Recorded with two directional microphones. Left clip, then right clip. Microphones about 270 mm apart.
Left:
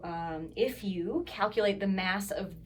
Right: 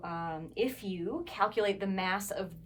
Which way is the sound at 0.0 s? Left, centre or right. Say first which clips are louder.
Left 1 dB; centre.